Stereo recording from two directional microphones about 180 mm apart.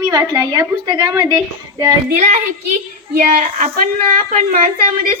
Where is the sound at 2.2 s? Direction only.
45° right (ahead or behind).